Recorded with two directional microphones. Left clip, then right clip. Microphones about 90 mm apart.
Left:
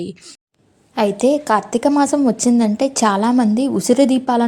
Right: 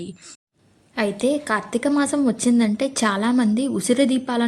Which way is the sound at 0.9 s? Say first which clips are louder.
Left 6 dB; 40° left (ahead or behind).